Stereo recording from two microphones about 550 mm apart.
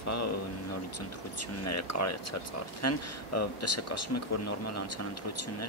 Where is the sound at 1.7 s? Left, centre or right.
Left.